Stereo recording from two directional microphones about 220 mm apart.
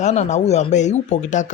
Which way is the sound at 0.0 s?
30° left (ahead or behind).